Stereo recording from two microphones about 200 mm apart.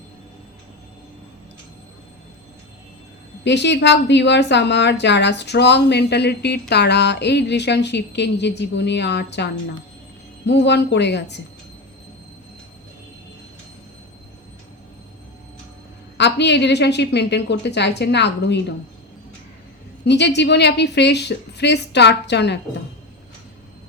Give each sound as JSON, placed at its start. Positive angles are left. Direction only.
{"t": 3.4, "sound": "a woman's voice", "side_deg": 60}
{"t": 16.1, "sound": "a woman's voice", "side_deg": 60}
{"t": 20.1, "sound": "a woman's voice", "side_deg": 60}